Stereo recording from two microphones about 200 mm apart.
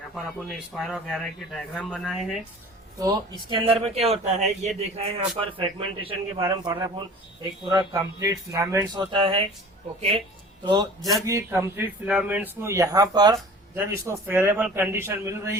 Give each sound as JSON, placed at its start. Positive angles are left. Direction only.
{"t": 0.1, "sound": "speech", "side_deg": 0}
{"t": 3.0, "sound": "a man's voice", "side_deg": -20}